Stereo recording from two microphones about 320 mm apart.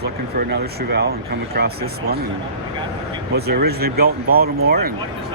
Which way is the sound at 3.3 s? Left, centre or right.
Right.